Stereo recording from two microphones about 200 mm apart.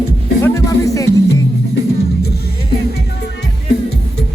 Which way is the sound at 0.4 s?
15° left (ahead or behind).